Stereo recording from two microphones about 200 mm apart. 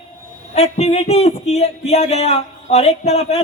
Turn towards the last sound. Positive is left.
turn(degrees=35)  # may be behind; listen again after turning